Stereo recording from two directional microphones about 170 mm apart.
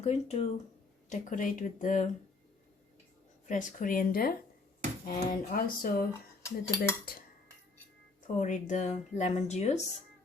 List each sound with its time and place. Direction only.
0.0 s speech: 40° left (ahead or behind)
3.4 s speech: 50° left (ahead or behind)
6.4 s cutlery: 15° left (ahead or behind)
8.4 s speech: 45° left (ahead or behind)